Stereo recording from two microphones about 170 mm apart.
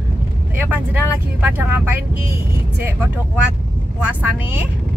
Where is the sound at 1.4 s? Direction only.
10° right (ahead or behind).